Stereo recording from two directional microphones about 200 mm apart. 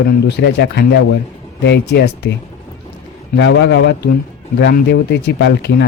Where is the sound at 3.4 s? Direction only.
60° left (ahead or behind).